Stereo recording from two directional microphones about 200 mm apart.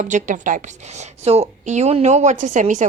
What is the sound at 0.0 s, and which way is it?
A woman's voice, 40° right (ahead or behind).